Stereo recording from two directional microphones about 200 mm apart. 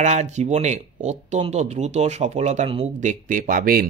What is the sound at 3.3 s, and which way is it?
Speech, 45° right (ahead or behind).